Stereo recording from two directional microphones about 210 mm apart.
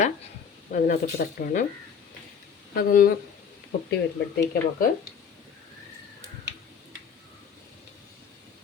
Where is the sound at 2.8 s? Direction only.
45° left (ahead or behind).